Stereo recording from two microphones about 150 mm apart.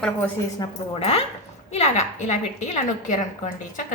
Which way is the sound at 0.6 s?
30° left (ahead or behind).